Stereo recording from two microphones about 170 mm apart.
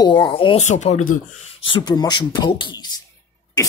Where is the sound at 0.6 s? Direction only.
45° left (ahead or behind).